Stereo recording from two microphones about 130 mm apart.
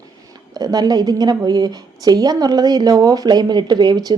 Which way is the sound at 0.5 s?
30° right (ahead or behind).